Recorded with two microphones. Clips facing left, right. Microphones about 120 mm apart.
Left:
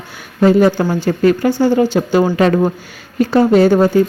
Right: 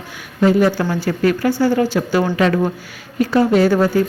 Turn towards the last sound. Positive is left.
turn(degrees=25)  # may be behind; listen again after turning